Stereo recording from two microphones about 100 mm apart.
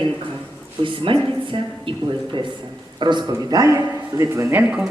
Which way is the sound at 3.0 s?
50° right (ahead or behind).